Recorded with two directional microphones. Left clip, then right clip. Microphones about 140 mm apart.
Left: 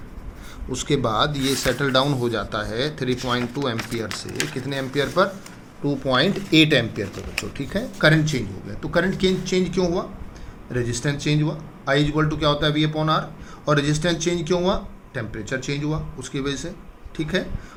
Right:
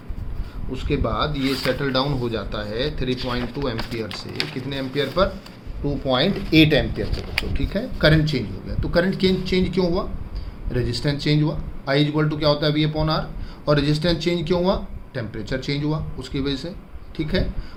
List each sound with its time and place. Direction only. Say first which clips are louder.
0.7 s speech: left 3 dB; 60° left (ahead or behind)
1.8 s a man's voice: left 3 dB; 25° left (ahead or behind); by 17.4 s 10° right (ahead or behind)